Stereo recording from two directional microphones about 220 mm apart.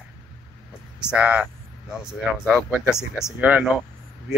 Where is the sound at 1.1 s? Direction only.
5° right (ahead or behind).